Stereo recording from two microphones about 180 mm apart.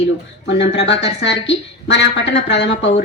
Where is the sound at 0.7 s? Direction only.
80° left.